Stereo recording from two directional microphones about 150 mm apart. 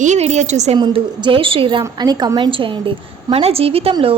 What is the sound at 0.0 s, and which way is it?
Speech, 50° right (ahead or behind).